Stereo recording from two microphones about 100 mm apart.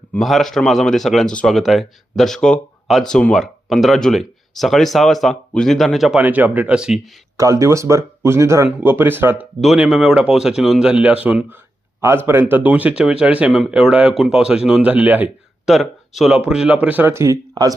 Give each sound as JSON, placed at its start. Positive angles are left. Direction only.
{"t": 0.2, "sound": "speech", "side_deg": 0}
{"t": 6.1, "sound": "speech", "side_deg": -15}
{"t": 7.3, "sound": "speech", "side_deg": -30}
{"t": 9.6, "sound": "speech", "side_deg": -5}
{"t": 15.6, "sound": "speech", "side_deg": 0}
{"t": 17.5, "sound": "speech", "side_deg": -40}